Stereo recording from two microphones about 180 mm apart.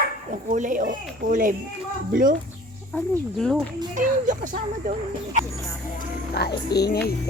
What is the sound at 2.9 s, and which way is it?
Speech, 5° left (ahead or behind).